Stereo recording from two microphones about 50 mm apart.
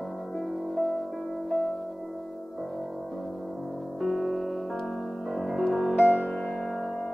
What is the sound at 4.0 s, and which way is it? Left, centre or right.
Music, centre.